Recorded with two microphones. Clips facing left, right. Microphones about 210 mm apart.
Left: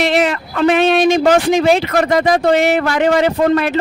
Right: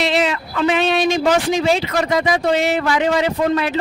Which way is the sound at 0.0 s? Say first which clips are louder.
Left 3 dB; 55° left (ahead or behind).